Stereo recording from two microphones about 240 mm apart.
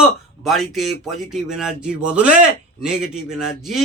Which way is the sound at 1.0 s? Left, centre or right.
Centre.